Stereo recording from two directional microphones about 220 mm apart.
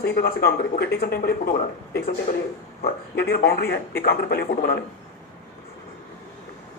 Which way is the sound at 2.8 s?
45° left (ahead or behind).